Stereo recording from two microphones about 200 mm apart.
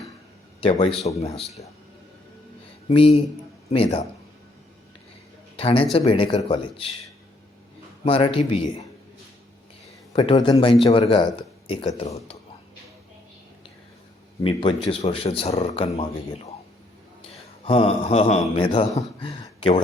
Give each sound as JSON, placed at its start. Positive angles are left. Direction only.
{"t": 0.6, "sound": "a man's voice", "side_deg": 25}
{"t": 2.9, "sound": "speech", "side_deg": 25}
{"t": 5.5, "sound": "speech", "side_deg": 25}
{"t": 8.0, "sound": "speech", "side_deg": 25}
{"t": 10.1, "sound": "speech", "side_deg": 20}
{"t": 14.4, "sound": "speech", "side_deg": 25}
{"t": 17.7, "sound": "speech", "side_deg": 30}